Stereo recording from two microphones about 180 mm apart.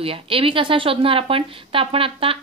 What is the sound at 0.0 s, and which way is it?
A woman's voice, 30° right (ahead or behind).